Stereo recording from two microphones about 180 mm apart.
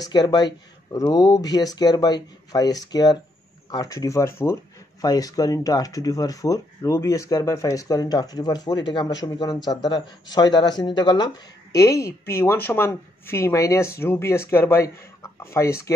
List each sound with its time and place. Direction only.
0.0 s speech: 20° left (ahead or behind)